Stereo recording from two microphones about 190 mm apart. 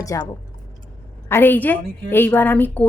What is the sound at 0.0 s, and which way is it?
Speech, 15° left (ahead or behind).